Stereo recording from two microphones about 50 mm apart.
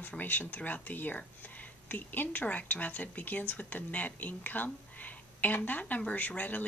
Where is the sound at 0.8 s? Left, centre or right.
Left.